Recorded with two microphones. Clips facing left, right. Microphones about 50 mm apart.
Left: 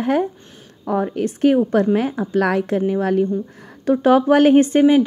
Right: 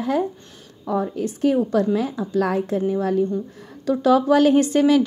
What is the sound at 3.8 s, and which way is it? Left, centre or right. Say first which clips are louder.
A woman's voice: left 3 dB; left.